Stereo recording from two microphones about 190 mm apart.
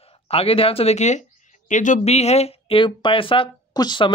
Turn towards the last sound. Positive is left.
turn(degrees=25)  # may be behind; listen again after turning